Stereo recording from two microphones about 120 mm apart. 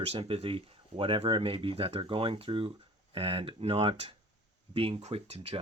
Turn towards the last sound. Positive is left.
turn(degrees=-60)  # may be behind; listen again after turning